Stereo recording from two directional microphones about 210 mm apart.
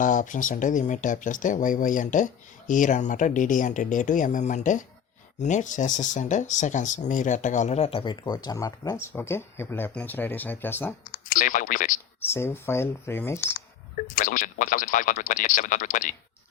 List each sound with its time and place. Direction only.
0.0 s speech: 40° left (ahead or behind); by 10.9 s 10° left (ahead or behind)
11.3 s speech: 40° left (ahead or behind)
12.2 s speech: 10° left (ahead or behind)
14.2 s speech: 40° left (ahead or behind)